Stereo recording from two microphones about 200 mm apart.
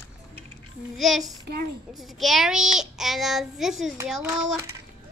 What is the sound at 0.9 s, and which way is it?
Speech, centre (ahead or behind).